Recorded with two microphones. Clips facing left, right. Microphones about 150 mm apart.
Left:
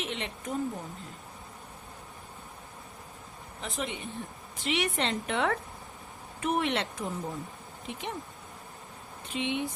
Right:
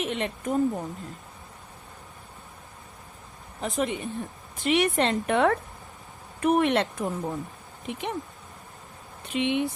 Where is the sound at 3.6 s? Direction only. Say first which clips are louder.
Right 8 dB; 45° right (ahead or behind).